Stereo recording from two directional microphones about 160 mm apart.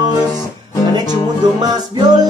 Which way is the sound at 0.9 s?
25° right (ahead or behind).